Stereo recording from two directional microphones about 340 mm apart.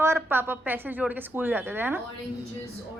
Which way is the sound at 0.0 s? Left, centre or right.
Centre.